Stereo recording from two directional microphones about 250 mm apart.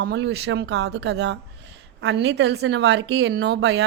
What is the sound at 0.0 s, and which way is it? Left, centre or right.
A woman's voice, right.